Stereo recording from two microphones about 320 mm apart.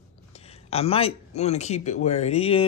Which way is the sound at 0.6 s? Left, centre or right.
Centre.